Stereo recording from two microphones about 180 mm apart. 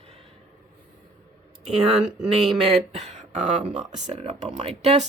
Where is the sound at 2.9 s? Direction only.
40° right (ahead or behind).